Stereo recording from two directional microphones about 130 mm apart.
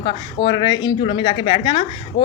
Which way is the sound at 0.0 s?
35° left (ahead or behind).